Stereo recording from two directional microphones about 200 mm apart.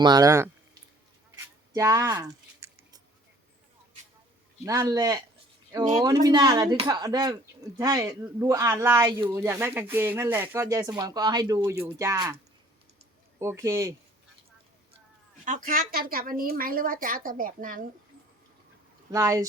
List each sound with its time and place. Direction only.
0.0 s speech: 20° right (ahead or behind)
1.7 s a sound: 15° right (ahead or behind)
4.6 s speech: 20° right (ahead or behind)
13.4 s speech: 15° right (ahead or behind)
15.4 s speech: 40° right (ahead or behind)
19.1 s speech: 15° right (ahead or behind)